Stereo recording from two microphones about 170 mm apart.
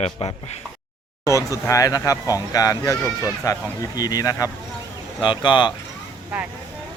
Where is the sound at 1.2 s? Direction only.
20° left (ahead or behind).